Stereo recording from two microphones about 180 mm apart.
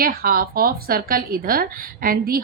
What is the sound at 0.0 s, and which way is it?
A woman's voice, 55° right (ahead or behind).